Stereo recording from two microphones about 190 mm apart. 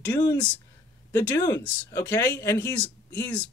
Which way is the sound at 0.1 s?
20° left (ahead or behind).